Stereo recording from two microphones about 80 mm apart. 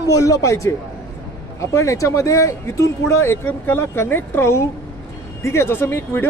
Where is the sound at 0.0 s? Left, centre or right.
Left.